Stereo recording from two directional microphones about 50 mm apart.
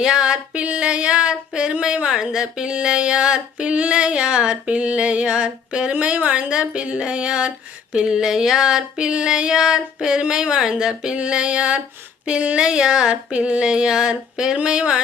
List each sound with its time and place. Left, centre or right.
0.0 s music: centre
0.5 s speech: right
6.5 s speech: centre
7.9 s female singing: centre
12.2 s speech: right